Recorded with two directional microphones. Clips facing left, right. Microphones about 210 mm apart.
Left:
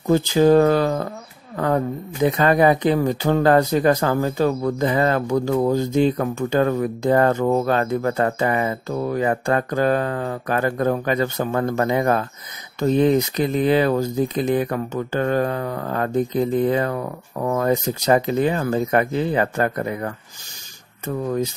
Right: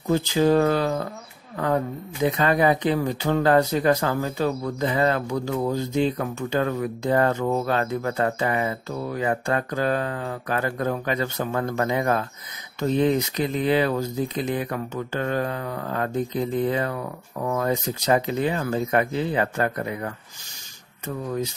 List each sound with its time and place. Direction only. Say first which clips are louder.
0.1 s speech: left 5 dB; 45° left (ahead or behind)
2.3 s speech: left 4 dB; 45° left (ahead or behind)